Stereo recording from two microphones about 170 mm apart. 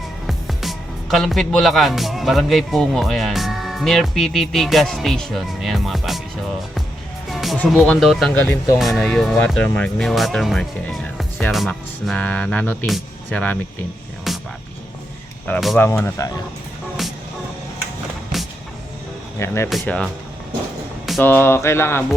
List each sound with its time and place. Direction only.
0.3 s speech: centre (ahead or behind)
7.3 s speech: centre (ahead or behind)
8.4 s speech: 20° left (ahead or behind)
8.8 s speech: centre (ahead or behind)
14.3 s music: centre (ahead or behind)
15.4 s speech: 5° left (ahead or behind)
19.4 s speech: 15° left (ahead or behind)
21.2 s speech: 10° left (ahead or behind)